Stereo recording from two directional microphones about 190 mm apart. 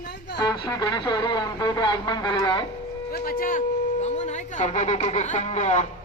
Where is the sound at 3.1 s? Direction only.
50° left (ahead or behind).